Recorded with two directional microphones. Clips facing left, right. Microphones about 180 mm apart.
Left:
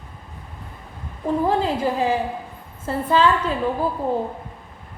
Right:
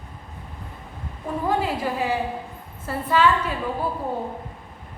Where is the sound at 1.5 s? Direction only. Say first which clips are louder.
Right 1 dB; 30° left (ahead or behind).